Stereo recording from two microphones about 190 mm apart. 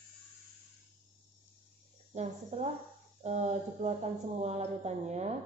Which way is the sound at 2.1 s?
35° right (ahead or behind).